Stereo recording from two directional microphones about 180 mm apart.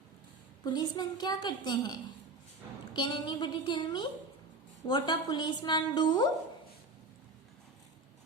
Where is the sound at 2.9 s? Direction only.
25° left (ahead or behind).